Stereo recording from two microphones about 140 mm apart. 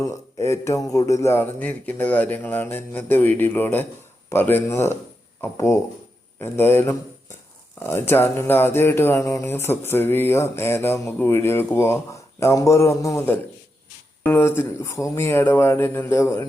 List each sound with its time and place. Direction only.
0.0 s speech: 20° left (ahead or behind)